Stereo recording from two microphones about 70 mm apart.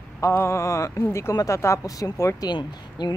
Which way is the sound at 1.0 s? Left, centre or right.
Left.